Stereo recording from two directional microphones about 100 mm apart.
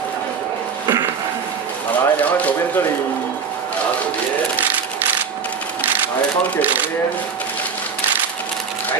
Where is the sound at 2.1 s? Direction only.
15° left (ahead or behind).